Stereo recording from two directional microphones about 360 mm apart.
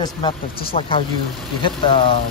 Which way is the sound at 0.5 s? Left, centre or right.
Left.